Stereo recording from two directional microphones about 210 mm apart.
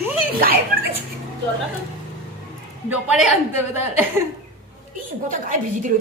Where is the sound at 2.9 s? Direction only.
5° right (ahead or behind).